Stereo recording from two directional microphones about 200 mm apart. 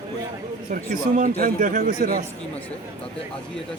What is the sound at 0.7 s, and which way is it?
Speech, 40° right (ahead or behind).